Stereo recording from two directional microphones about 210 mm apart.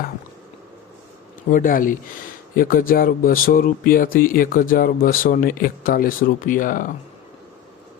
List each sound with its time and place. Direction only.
1.5 s speech: 40° left (ahead or behind)